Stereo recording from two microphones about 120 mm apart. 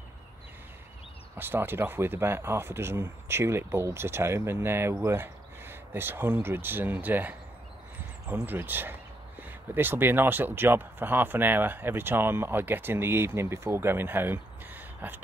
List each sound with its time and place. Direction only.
1.3 s speech: 15° right (ahead or behind)